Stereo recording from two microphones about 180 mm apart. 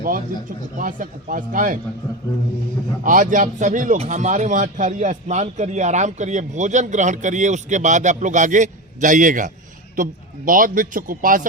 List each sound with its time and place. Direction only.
0.8 s a man's voice: 50° right (ahead or behind)
3.0 s a man's voice: 45° right (ahead or behind)